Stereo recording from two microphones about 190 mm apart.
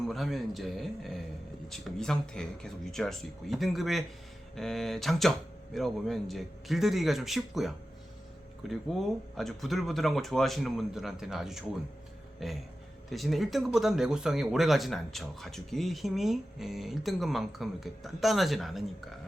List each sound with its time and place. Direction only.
0.1 s speech: centre (ahead or behind)
8.9 s speech: centre (ahead or behind)